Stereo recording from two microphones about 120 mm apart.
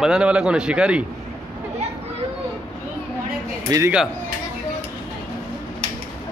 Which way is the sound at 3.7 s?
35° right (ahead or behind).